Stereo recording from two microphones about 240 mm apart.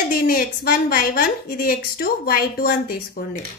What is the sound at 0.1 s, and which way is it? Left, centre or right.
A woman's voice, left.